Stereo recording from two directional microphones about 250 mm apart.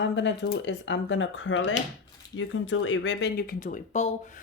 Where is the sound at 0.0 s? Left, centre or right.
Left.